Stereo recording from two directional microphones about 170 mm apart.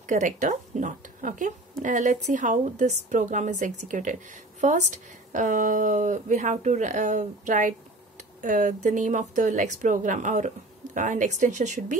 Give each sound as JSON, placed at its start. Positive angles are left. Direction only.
{"t": 0.0, "sound": "speech", "side_deg": -45}